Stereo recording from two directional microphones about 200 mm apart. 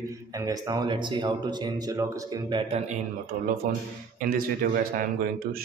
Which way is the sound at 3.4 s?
45° right (ahead or behind).